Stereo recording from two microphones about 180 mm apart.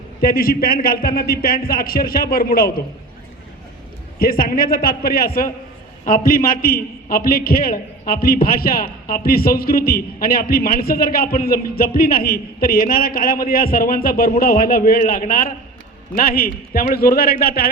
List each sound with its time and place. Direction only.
0.2 s a man's voice: 55° left (ahead or behind)
4.2 s a man's voice: 55° left (ahead or behind)